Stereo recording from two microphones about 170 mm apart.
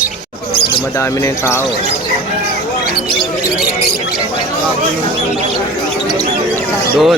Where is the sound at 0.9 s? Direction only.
15° left (ahead or behind).